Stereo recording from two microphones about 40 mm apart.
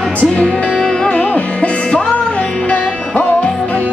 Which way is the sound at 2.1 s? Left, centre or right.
Left.